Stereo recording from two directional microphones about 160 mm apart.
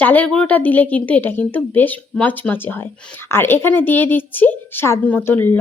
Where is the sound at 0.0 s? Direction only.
10° left (ahead or behind).